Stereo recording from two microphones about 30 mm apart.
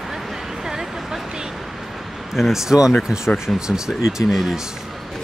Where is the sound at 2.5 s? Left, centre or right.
Centre.